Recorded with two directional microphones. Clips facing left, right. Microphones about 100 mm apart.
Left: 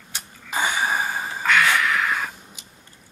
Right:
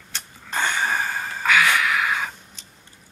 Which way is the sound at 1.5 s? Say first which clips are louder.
Even; centre (ahead or behind).